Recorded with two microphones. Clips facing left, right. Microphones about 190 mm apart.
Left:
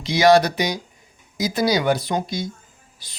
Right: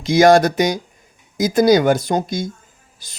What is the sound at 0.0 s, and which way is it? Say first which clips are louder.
Speech: right 4 dB; 50° right (ahead or behind).